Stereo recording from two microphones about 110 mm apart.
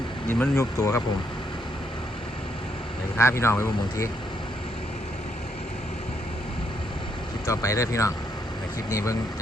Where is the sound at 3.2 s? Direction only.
25° left (ahead or behind).